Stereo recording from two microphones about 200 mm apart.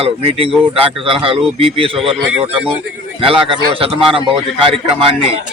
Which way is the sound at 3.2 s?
25° right (ahead or behind).